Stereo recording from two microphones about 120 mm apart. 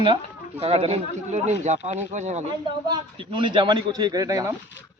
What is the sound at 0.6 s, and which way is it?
Speech, 55° right (ahead or behind).